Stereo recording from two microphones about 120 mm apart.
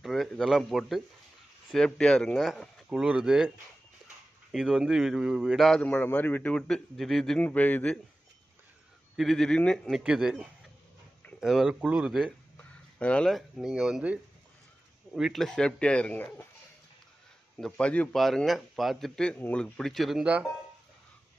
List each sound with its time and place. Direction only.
0.0 s a man's voice: centre (ahead or behind)
7.4 s speech: 15° left (ahead or behind)
9.1 s a man's voice: centre (ahead or behind)
9.9 s a man's voice: 5° right (ahead or behind)
12.5 s a sound: 10° left (ahead or behind)
13.6 s a man's voice: 5° right (ahead or behind); by 16.4 s 15° left (ahead or behind)
17.6 s a man's voice: 5° left (ahead or behind)